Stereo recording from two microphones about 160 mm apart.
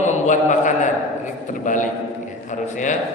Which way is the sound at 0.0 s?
50° left (ahead or behind).